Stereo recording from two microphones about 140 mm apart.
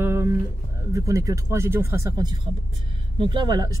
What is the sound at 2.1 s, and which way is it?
Speech, 30° right (ahead or behind).